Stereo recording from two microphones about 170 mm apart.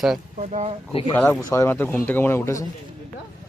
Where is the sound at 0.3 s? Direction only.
40° right (ahead or behind).